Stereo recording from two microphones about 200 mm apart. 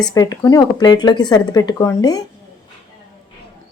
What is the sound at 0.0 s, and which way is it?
A woman's voice, 20° left (ahead or behind).